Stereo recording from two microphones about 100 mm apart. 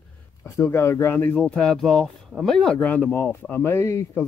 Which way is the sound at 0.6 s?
25° left (ahead or behind).